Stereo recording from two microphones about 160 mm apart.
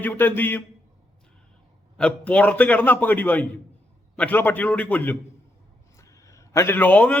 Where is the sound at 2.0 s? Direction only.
5° left (ahead or behind).